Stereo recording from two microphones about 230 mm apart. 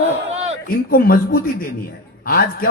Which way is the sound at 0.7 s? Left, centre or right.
Left.